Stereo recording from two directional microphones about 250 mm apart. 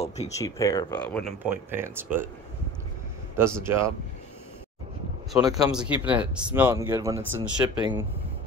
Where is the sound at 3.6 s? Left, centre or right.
Centre.